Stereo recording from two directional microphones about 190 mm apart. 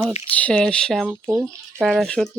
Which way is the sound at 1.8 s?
Centre (ahead or behind).